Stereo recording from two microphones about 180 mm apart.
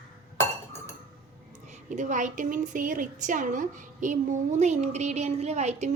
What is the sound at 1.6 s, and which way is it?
A woman's voice, 45° right (ahead or behind).